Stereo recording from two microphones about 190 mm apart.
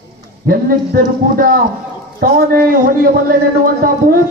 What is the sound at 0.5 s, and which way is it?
A man's voice, 50° right (ahead or behind).